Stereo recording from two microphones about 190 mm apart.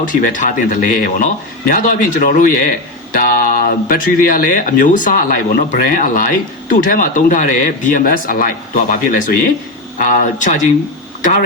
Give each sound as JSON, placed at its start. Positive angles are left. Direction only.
{"t": 0.0, "sound": "speech", "side_deg": 45}